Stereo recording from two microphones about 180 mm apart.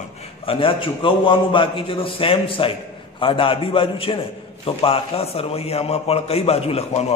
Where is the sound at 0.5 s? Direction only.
30° left (ahead or behind).